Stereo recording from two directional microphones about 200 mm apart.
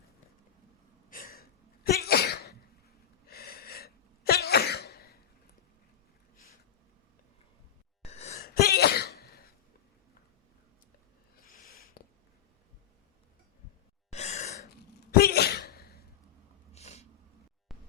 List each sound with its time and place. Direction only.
1.1 s sneeze: 45° left (ahead or behind)
3.2 s cough: 50° left (ahead or behind)
8.0 s gasp: 35° left (ahead or behind)
8.4 s throat clearing: 50° left (ahead or behind)
11.4 s a sound: 45° left (ahead or behind)
14.1 s sigh: 35° left (ahead or behind)
15.1 s sneeze: 50° left (ahead or behind)
16.7 s sneeze: 35° left (ahead or behind)
17.7 s music: centre (ahead or behind)